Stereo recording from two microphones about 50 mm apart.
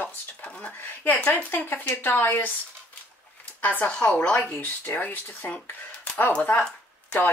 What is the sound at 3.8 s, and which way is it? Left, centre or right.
Speech, left.